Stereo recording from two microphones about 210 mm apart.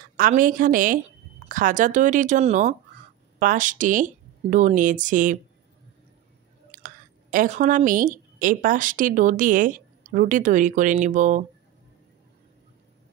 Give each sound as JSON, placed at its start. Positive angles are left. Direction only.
{"t": 0.2, "sound": "a woman's voice", "side_deg": -40}
{"t": 6.7, "sound": "speech", "side_deg": -40}